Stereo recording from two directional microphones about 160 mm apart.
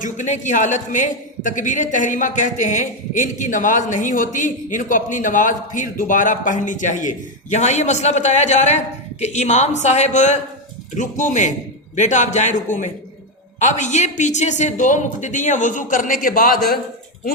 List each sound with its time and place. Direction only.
0.0 s a woman's voice: 50° left (ahead or behind); by 16.8 s 70° left (ahead or behind)